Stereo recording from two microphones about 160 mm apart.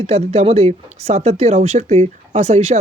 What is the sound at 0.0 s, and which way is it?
Speech, 40° right (ahead or behind).